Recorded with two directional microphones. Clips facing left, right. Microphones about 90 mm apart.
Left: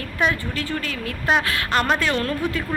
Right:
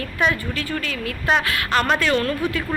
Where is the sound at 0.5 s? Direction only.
30° left (ahead or behind).